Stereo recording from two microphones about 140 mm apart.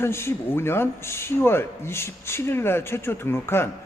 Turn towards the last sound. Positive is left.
turn(degrees=15)  # may be behind; listen again after turning